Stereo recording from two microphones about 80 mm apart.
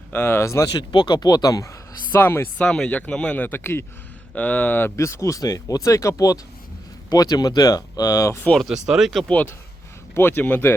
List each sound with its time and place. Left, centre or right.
0.1 s speech: left
0.7 s speech: left
2.1 s speech: left
2.6 s speech: centre
4.9 s speech: left
8.5 s speech: centre
9.2 s speech: centre